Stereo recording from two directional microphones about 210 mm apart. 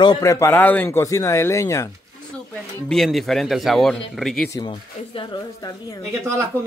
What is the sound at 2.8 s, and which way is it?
Speech, centre (ahead or behind).